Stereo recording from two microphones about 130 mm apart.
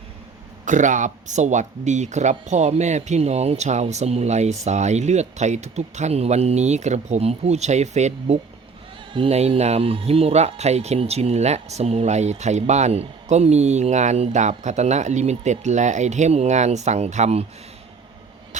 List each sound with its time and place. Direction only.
0.6 s speech: 75° right (ahead or behind)
9.1 s speech: 50° right (ahead or behind)